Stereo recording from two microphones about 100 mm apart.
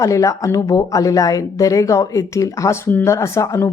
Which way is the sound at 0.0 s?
35° left (ahead or behind).